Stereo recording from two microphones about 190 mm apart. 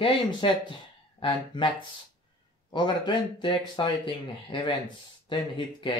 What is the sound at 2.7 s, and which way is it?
Speech, 25° left (ahead or behind).